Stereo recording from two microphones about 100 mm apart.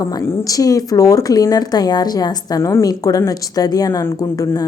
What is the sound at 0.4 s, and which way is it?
Speech, 35° left (ahead or behind).